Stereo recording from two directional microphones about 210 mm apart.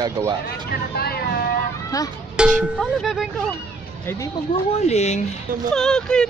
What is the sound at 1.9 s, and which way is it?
Speech, 15° left (ahead or behind).